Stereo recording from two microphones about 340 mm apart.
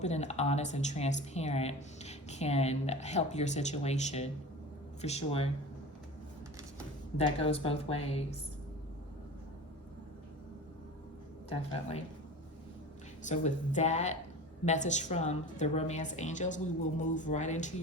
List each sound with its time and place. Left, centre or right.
0.0 s a woman's voice: centre
7.2 s a woman's voice: centre
11.4 s a woman's voice: centre
13.2 s speech: left